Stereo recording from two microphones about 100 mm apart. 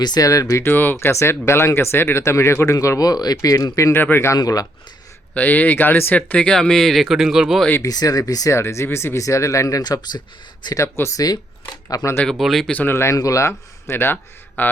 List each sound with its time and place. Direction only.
0.0 s speech: 40° left (ahead or behind)
3.9 s speech: 20° left (ahead or behind)
4.4 s speech: 40° left (ahead or behind)
5.3 s speech: 15° left (ahead or behind); by 7.6 s 5° right (ahead or behind)
7.8 s speech: 40° left (ahead or behind)
10.8 s speech: 25° left (ahead or behind)
11.9 s speech: 35° left (ahead or behind)
12.2 s speech: centre (ahead or behind)
12.7 s speech: 20° left (ahead or behind)